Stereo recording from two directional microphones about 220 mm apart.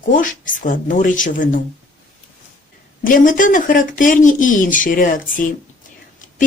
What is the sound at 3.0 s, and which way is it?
Speech, 40° left (ahead or behind).